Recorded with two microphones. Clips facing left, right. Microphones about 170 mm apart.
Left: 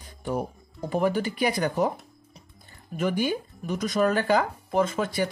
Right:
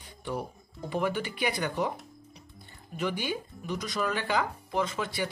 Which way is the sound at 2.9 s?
45° left (ahead or behind).